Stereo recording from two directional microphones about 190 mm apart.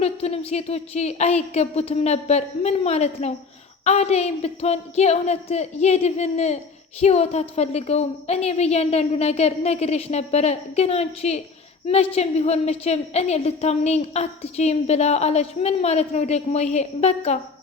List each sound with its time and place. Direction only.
0.0 s a woman's voice: 35° left (ahead or behind)